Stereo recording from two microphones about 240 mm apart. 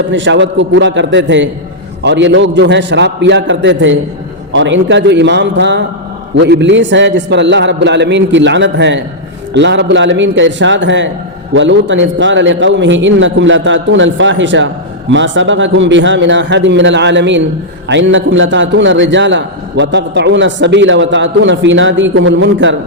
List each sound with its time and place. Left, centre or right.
0.1 s a man's voice: right